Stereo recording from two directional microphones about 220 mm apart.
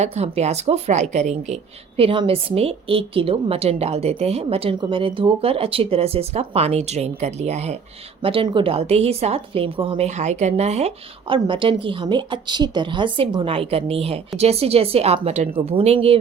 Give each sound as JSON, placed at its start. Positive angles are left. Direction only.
{"t": 0.0, "sound": "a woman's voice", "side_deg": -30}